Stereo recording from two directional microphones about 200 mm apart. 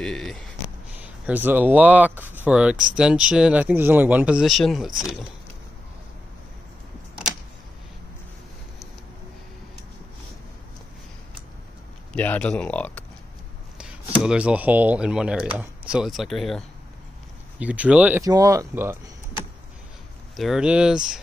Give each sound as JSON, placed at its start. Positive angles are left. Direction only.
{"t": 0.0, "sound": "speech", "side_deg": 0}
{"t": 12.1, "sound": "speech", "side_deg": 5}
{"t": 13.7, "sound": "speech", "side_deg": -5}
{"t": 20.3, "sound": "speech", "side_deg": 0}